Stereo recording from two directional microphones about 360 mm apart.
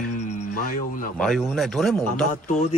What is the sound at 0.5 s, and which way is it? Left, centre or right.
Speech, left.